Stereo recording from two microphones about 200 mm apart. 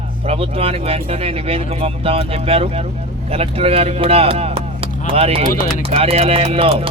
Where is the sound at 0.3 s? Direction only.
30° right (ahead or behind).